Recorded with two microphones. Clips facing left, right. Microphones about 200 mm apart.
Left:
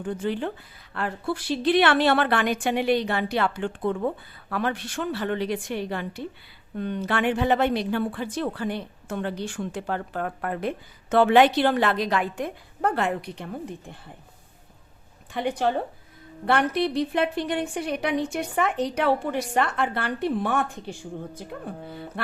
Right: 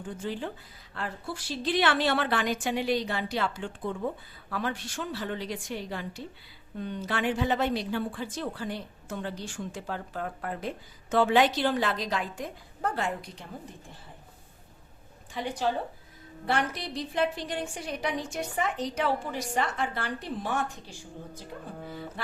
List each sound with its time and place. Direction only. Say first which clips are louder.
0.0 s speech: left 7 dB; 65° left (ahead or behind)
15.3 s speech: left 5 dB; 60° left (ahead or behind)